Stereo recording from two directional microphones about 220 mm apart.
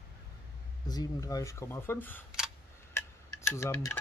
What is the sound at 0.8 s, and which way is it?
Speech, 20° left (ahead or behind).